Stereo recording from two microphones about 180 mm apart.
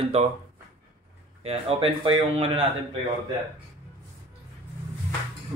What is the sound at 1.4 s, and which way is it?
Speech, 35° right (ahead or behind).